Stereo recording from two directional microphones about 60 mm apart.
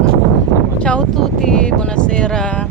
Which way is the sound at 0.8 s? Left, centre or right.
Centre.